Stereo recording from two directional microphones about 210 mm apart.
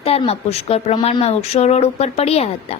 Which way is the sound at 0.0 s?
30° left (ahead or behind).